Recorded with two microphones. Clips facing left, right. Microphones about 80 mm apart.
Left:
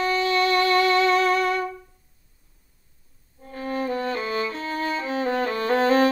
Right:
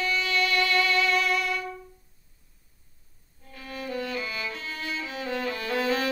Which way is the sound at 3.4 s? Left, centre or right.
Left.